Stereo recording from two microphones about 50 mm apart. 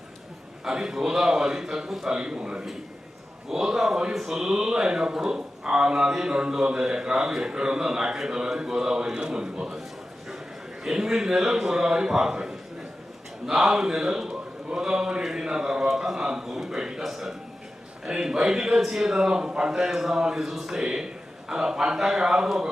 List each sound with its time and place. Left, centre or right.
0.6 s a man's voice: centre
10.8 s a man's voice: centre